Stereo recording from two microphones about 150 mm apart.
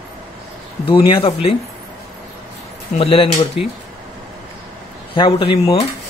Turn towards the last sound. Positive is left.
turn(degrees=35)  # may be behind; listen again after turning